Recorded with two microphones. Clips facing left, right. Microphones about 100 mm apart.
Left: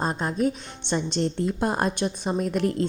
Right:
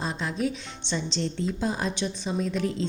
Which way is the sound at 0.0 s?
45° left (ahead or behind).